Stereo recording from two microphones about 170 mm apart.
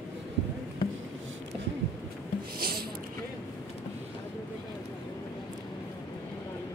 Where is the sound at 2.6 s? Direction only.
60° right (ahead or behind).